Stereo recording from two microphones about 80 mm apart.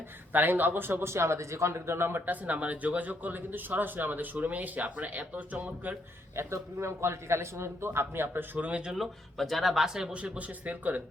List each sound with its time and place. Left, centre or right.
0.3 s a man's voice: right
6.3 s a man's voice: right
8.5 s speech: centre